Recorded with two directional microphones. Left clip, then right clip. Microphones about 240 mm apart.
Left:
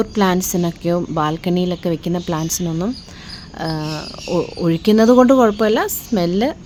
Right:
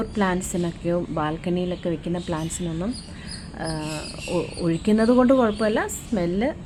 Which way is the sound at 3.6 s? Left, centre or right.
Left.